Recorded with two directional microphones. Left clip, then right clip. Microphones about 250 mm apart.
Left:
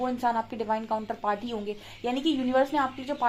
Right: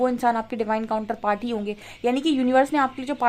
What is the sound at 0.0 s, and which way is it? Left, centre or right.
A woman's voice, right.